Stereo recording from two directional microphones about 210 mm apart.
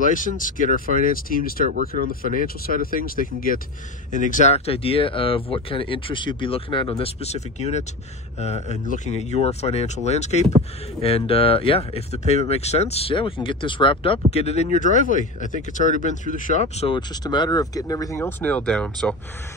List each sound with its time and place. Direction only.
0.0 s speech: 40° left (ahead or behind)
1.7 s speech: 40° right (ahead or behind)
2.2 s speech: 40° left (ahead or behind); by 19.1 s 5° left (ahead or behind)